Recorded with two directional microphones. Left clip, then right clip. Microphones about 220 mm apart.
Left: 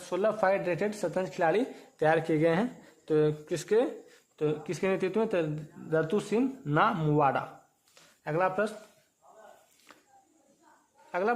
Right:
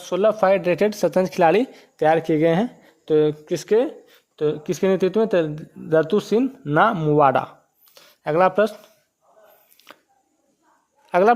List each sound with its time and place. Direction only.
0.0 s speech: 35° right (ahead or behind)
7.9 s a sound: 45° right (ahead or behind)
11.1 s speech: 40° right (ahead or behind)